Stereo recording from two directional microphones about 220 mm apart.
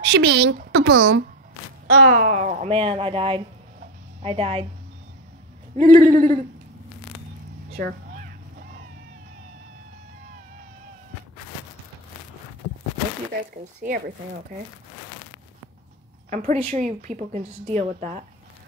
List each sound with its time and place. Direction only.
0.0 s a woman's voice: 50° right (ahead or behind)
1.9 s speech: 35° right (ahead or behind)
5.8 s a woman's voice: 35° right (ahead or behind)
13.7 s speech: 45° right (ahead or behind)
16.3 s a woman's voice: 35° right (ahead or behind)